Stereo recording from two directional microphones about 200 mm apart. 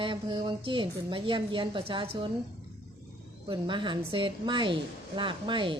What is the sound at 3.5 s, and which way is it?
Speech, 25° right (ahead or behind).